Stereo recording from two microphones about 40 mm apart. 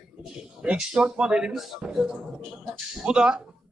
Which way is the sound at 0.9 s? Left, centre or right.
Right.